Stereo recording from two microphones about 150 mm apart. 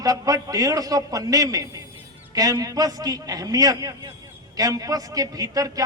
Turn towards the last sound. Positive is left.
turn(degrees=-25)  # may be behind; listen again after turning